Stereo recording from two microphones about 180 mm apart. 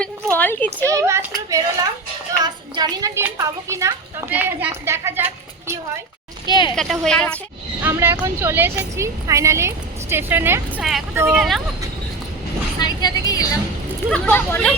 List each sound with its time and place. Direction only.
0.3 s speech: 10° left (ahead or behind)
0.9 s a woman's voice: 15° right (ahead or behind)
6.5 s speech: 25° left (ahead or behind)
6.7 s speech: centre (ahead or behind)
7.8 s speech: 10° right (ahead or behind)
11.3 s speech: centre (ahead or behind)
12.8 s vehicle: 20° left (ahead or behind)
14.1 s speech: 10° left (ahead or behind)